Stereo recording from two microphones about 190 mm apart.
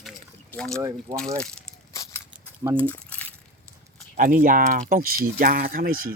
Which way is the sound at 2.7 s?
10° left (ahead or behind).